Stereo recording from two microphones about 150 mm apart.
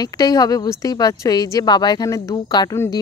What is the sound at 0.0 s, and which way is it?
Speech, 25° left (ahead or behind).